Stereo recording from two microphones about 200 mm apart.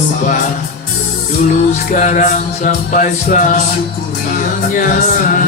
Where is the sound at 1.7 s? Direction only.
40° left (ahead or behind).